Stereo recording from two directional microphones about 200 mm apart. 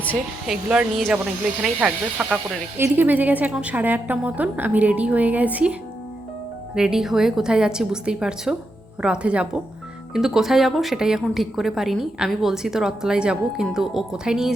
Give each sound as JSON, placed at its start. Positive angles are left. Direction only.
{"t": 0.0, "sound": "speech", "side_deg": 5}
{"t": 0.5, "sound": "speech", "side_deg": -5}
{"t": 6.7, "sound": "a woman's voice", "side_deg": -5}